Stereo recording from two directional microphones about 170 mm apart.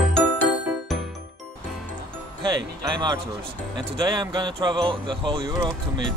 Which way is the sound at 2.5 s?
25° right (ahead or behind).